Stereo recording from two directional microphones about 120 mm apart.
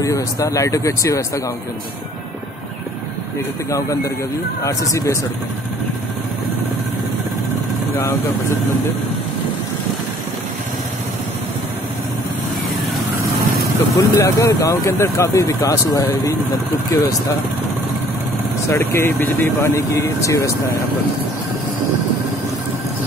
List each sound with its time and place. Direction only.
0.0 s speech: 30° left (ahead or behind)
3.7 s speech: 25° left (ahead or behind)
13.9 s speech: 25° left (ahead or behind)
18.7 s speech: 20° left (ahead or behind)